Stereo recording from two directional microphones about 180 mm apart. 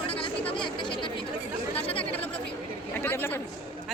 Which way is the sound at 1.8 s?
30° left (ahead or behind).